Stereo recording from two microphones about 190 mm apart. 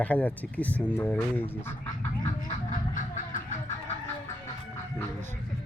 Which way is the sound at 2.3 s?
45° left (ahead or behind).